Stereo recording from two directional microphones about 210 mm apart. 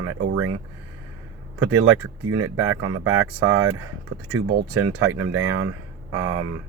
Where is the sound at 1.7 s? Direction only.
80° right.